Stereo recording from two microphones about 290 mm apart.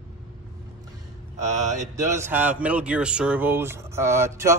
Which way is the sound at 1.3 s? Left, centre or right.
Right.